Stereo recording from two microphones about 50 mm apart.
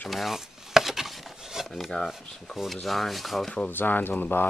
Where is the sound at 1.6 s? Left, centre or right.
Centre.